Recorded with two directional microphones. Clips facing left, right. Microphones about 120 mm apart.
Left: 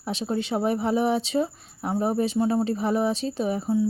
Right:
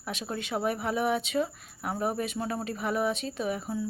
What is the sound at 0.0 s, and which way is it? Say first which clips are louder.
Speech: left 8 dB; 30° left (ahead or behind).